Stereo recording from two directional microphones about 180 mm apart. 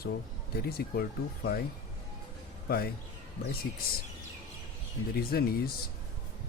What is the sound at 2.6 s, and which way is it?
Speech, 60° left (ahead or behind).